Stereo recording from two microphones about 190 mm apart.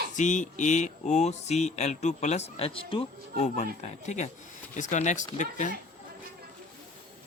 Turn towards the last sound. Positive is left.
turn(degrees=40)  # may be behind; listen again after turning